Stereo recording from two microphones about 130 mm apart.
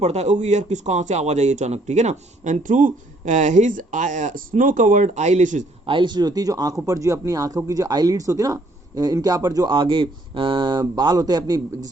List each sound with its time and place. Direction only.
0.0 s speech: 55° right (ahead or behind)
5.8 s speech: 40° right (ahead or behind)